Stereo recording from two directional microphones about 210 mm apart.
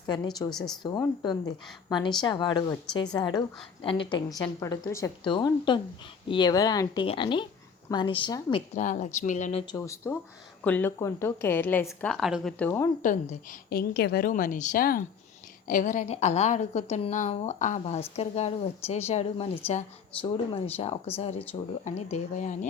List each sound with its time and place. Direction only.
0.1 s a woman's voice: 20° left (ahead or behind)
0.5 s speech: centre (ahead or behind)
0.8 s a woman's voice: 20° left (ahead or behind)
8.7 s a woman's voice: 35° left (ahead or behind)
9.7 s a woman's voice: 15° left (ahead or behind)
13.7 s a woman's voice: 50° left (ahead or behind); by 22.5 s 35° left (ahead or behind)